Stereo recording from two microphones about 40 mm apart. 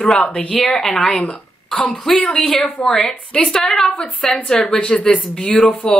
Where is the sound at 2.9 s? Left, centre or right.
Centre.